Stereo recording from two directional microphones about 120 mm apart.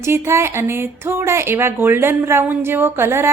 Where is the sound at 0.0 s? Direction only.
20° right (ahead or behind).